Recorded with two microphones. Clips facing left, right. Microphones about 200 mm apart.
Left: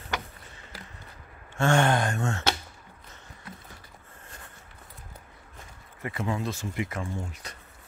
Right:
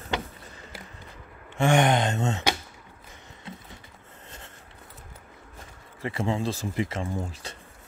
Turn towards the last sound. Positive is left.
turn(degrees=-30)  # may be behind; listen again after turning